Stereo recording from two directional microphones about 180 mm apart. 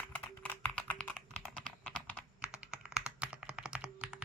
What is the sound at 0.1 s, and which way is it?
Typing, 10° left (ahead or behind).